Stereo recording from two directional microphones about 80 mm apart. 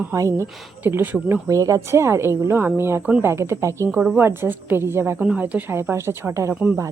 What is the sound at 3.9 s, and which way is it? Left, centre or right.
A woman's voice, right.